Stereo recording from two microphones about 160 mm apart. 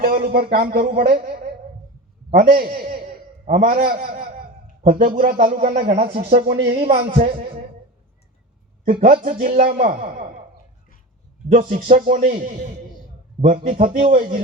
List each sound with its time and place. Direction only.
0.0 s speech: 65° right (ahead or behind)
2.3 s a man's voice: 55° right (ahead or behind)
5.6 s a man's voice: 40° right (ahead or behind)
8.8 s a man's voice: 60° right (ahead or behind)
11.5 s a man's voice: 55° right (ahead or behind)